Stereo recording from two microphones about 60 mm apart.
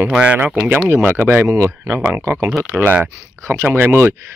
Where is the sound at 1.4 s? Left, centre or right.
Right.